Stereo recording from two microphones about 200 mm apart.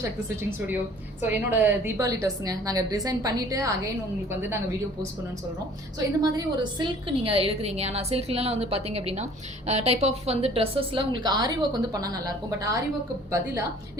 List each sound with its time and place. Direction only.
1.2 s a woman's voice: 10° right (ahead or behind)
6.3 s a woman's voice: 20° right (ahead or behind)